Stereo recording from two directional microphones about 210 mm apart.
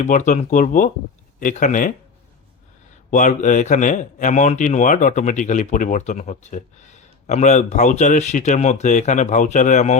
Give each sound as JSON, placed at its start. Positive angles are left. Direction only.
{"t": 0.0, "sound": "a man's voice", "side_deg": 35}
{"t": 3.1, "sound": "a man's voice", "side_deg": 35}